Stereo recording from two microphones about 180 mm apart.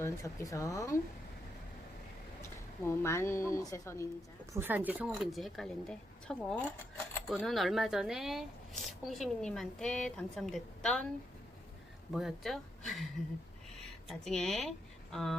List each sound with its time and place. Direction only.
0.0 s speech: 15° left (ahead or behind)
2.8 s speech: 15° left (ahead or behind)
4.5 s speech: 10° right (ahead or behind)
12.1 s speech: centre (ahead or behind)
14.1 s speech: centre (ahead or behind)